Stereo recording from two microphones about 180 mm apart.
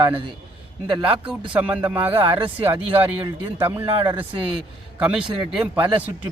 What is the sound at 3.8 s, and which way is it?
Speech, 25° right (ahead or behind).